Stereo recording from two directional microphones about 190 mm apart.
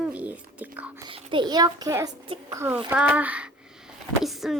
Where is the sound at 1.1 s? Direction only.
25° right (ahead or behind).